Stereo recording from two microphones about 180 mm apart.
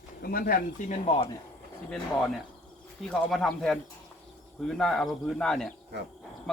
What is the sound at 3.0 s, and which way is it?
Speech, centre (ahead or behind).